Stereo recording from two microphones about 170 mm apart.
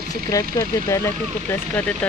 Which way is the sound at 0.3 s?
20° left (ahead or behind).